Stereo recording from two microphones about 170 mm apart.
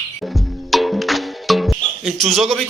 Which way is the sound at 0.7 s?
Centre (ahead or behind).